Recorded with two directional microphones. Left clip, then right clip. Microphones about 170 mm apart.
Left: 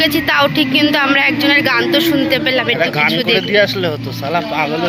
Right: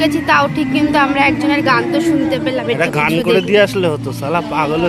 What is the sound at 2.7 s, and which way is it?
Speech, 90° right.